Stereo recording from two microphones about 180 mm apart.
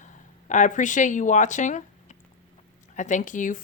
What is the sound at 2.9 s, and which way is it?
Speech, 45° left (ahead or behind).